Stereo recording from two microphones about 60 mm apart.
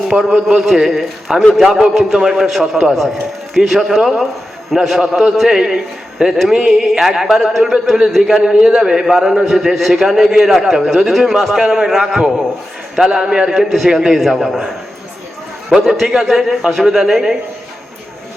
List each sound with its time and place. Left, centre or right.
0.1 s a man's voice: centre
15.7 s a man's voice: centre